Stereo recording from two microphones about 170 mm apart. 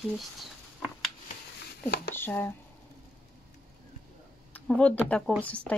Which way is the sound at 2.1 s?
15° left (ahead or behind).